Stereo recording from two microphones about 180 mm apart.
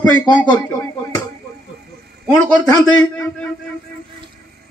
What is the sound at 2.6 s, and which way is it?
Speech, 20° left (ahead or behind).